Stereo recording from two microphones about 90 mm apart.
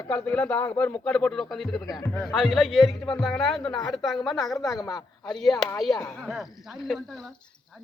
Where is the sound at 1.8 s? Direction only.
40° left (ahead or behind).